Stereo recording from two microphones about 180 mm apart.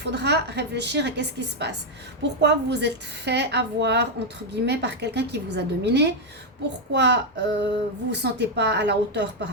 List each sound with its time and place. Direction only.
0.0 s a woman's voice: 70° right (ahead or behind)